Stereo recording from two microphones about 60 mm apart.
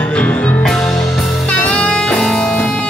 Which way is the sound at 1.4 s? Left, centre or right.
Left.